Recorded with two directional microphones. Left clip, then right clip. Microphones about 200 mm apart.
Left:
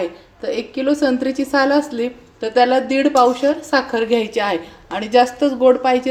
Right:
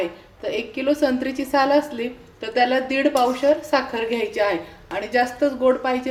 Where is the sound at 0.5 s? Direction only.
20° left (ahead or behind).